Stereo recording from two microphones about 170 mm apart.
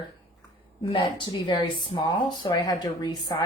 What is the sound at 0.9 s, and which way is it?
Speech, 25° left (ahead or behind).